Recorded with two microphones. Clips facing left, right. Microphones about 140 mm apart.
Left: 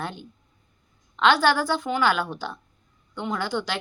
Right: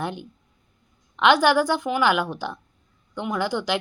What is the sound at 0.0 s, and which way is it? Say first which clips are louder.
Speech: right 4 dB; 15° right (ahead or behind).